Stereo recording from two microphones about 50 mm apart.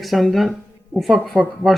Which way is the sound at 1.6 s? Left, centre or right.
Right.